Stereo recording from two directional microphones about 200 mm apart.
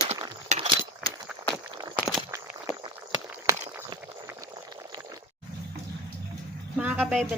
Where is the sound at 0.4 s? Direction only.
35° right (ahead or behind).